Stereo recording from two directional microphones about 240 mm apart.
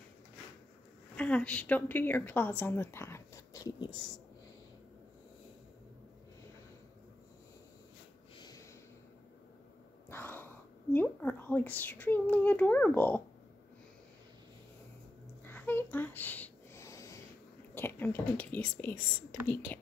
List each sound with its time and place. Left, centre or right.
1.1 s a woman's voice: centre
8.4 s snort: centre
10.0 s speech: centre
15.4 s a sound: centre
17.7 s a woman's voice: centre